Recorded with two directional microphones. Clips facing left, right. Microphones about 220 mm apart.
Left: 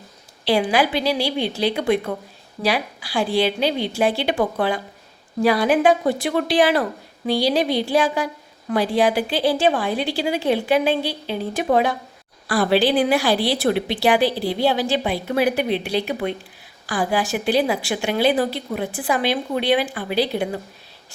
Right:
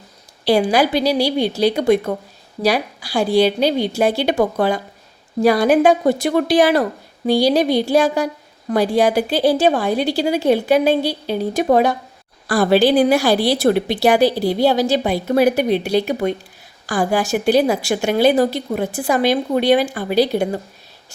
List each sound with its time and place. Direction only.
0.4 s a woman's voice: 40° right (ahead or behind)